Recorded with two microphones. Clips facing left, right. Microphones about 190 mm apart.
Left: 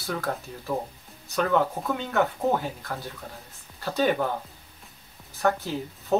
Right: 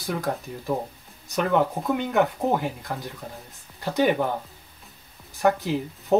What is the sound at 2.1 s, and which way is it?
Speech, 15° right (ahead or behind).